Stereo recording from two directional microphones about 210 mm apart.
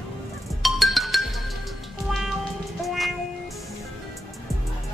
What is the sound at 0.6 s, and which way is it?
Music, centre (ahead or behind).